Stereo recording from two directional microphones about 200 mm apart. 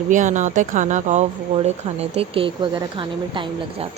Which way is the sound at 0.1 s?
40° right (ahead or behind).